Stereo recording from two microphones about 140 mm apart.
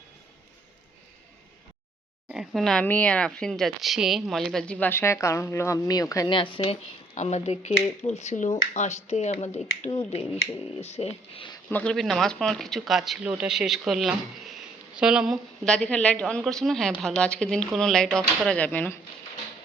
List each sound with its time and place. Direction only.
2.3 s speech: 5° right (ahead or behind); by 6.3 s 25° left (ahead or behind)
6.3 s speech: 35° left (ahead or behind)
6.6 s speech: 50° left (ahead or behind)
11.7 s speech: 10° left (ahead or behind)
15.6 s speech: 5° left (ahead or behind)